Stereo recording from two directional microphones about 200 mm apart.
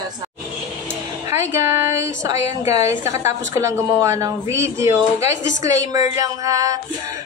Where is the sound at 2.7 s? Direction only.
15° right (ahead or behind).